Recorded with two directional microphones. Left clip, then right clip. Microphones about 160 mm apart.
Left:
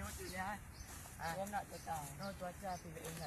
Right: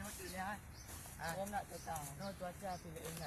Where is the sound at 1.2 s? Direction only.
30° right (ahead or behind).